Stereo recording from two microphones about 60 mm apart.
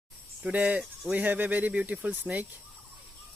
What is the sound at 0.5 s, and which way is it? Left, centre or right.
Speech, right.